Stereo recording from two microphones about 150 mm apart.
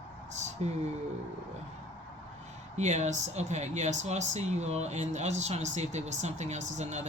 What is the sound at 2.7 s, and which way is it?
Speech, 50° right (ahead or behind).